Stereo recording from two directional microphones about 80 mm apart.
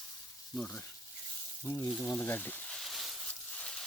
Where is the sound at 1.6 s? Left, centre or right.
Left.